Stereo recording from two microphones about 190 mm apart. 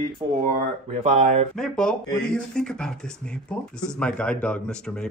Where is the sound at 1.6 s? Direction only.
5° left (ahead or behind).